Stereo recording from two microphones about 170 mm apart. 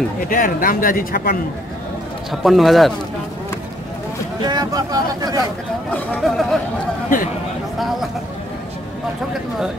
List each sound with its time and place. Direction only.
0.3 s speech: 55° left (ahead or behind)
2.4 s speech: centre (ahead or behind)
4.4 s speech: 25° right (ahead or behind)
5.9 s speech: centre (ahead or behind)